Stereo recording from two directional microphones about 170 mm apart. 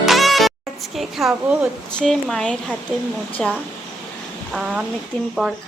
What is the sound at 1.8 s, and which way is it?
Speech, 5° left (ahead or behind).